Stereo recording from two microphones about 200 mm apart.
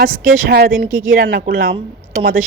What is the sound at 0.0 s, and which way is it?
Speech, 50° right (ahead or behind).